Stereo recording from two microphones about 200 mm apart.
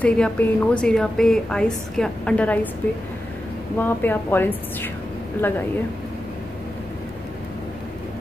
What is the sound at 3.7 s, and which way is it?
Speech, 10° left (ahead or behind).